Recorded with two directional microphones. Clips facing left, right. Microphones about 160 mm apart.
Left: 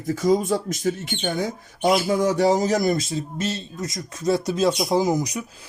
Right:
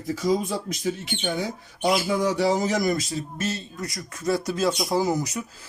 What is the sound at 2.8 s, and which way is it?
Speech, 25° left (ahead or behind).